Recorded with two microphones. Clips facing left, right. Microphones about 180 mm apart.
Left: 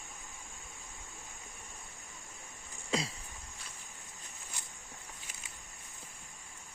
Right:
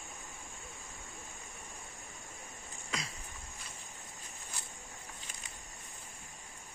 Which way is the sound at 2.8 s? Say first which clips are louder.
Left 8 dB; 30° left (ahead or behind).